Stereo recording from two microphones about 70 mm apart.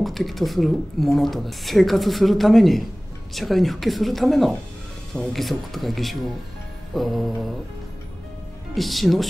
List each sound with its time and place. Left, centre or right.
0.0 s speech: centre
8.7 s speech: centre